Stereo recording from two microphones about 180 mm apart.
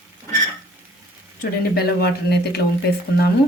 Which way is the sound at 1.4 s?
60° left (ahead or behind).